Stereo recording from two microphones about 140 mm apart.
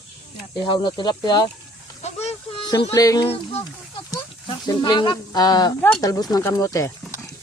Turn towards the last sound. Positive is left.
turn(degrees=25)  # may be behind; listen again after turning